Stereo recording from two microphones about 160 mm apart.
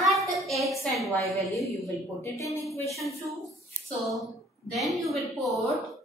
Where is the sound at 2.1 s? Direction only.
20° left (ahead or behind).